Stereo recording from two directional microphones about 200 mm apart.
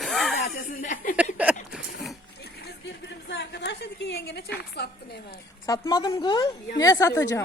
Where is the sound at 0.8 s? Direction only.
40° left (ahead or behind).